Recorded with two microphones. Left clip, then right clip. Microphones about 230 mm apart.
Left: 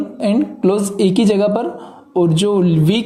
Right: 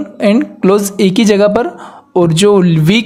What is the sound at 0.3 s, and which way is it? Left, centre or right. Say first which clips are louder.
Speech: right 2 dB; right.